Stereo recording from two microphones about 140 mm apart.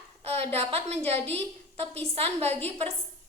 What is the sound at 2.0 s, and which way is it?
Speech, 45° right (ahead or behind).